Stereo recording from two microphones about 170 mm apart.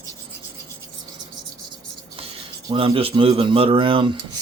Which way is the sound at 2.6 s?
30° right (ahead or behind).